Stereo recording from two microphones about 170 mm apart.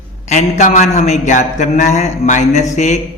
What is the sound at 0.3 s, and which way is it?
A man's voice, 45° left (ahead or behind).